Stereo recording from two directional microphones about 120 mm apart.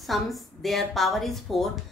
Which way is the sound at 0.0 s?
Centre (ahead or behind).